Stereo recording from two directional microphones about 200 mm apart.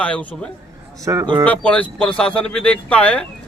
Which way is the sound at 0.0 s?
5° left (ahead or behind).